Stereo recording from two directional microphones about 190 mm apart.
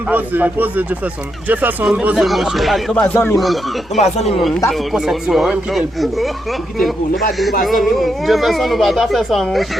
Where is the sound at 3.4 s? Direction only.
Centre (ahead or behind).